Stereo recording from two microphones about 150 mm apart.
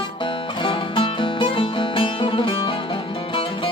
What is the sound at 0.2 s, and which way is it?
Music, 35° left (ahead or behind).